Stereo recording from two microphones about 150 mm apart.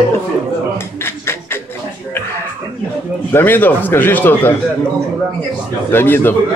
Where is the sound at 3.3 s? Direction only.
15° left (ahead or behind).